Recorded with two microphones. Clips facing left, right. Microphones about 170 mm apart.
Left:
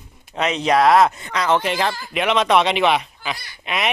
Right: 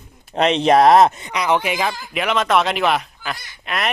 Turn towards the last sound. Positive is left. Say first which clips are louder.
# even
turn(degrees=0)  # may be behind; listen again after turning